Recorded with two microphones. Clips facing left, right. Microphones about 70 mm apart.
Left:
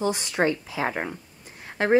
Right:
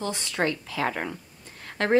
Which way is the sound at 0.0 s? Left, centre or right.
Centre.